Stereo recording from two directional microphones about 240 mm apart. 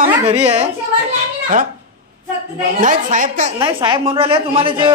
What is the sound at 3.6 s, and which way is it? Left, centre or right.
A woman's voice, centre.